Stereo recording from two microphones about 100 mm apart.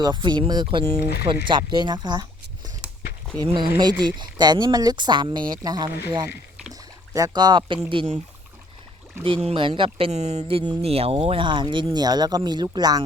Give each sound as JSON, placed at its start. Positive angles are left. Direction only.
{"t": 0.0, "sound": "speech", "side_deg": -50}
{"t": 3.4, "sound": "speech", "side_deg": -50}
{"t": 7.1, "sound": "speech", "side_deg": -40}
{"t": 9.2, "sound": "speech", "side_deg": -75}
{"t": 9.6, "sound": "speech", "side_deg": -60}